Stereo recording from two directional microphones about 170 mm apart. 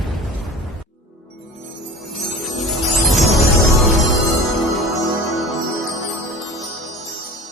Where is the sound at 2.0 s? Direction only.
Centre (ahead or behind).